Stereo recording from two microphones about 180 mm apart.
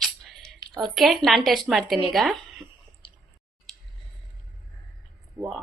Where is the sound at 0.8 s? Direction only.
Centre (ahead or behind).